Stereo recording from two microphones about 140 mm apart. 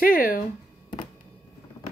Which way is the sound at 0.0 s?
85° left.